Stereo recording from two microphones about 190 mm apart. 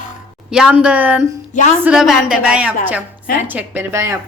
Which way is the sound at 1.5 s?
40° left (ahead or behind).